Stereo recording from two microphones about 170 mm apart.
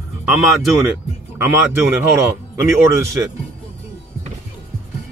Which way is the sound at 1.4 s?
15° right (ahead or behind).